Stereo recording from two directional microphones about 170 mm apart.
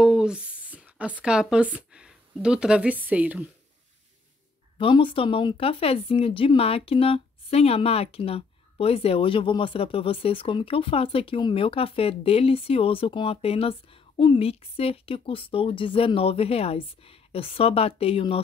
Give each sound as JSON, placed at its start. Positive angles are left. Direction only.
{"t": 0.0, "sound": "speech", "side_deg": -5}
{"t": 4.7, "sound": "speech", "side_deg": 30}